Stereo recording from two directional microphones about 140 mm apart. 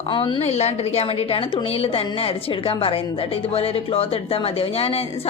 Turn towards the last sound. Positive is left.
turn(degrees=45)  # may be behind; listen again after turning